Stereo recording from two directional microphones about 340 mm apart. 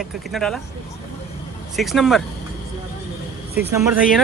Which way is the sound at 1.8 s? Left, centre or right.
Centre.